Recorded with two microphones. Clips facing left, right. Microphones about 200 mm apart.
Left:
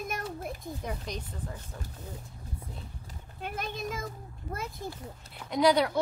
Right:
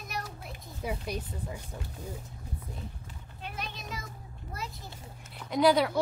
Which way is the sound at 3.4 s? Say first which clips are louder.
Left 6 dB; 50° left (ahead or behind).